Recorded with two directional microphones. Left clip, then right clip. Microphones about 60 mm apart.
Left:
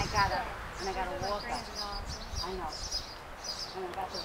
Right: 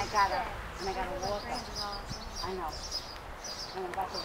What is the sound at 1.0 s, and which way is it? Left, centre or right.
Speech, centre.